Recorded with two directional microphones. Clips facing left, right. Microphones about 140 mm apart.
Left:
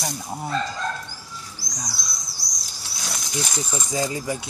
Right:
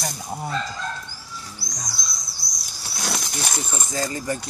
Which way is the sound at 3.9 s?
10° left (ahead or behind).